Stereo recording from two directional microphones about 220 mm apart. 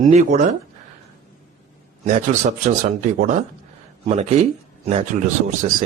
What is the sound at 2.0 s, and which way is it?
Speech, 30° right (ahead or behind).